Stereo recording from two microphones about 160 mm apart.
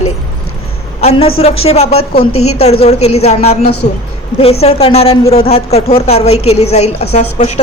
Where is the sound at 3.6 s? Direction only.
90° left.